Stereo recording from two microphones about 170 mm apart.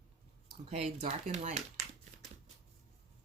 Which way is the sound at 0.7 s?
40° right (ahead or behind).